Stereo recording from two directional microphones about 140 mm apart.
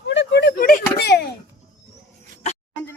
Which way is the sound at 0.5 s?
90° left.